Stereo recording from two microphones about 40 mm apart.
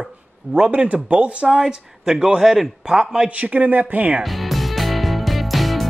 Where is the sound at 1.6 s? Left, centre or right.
Centre.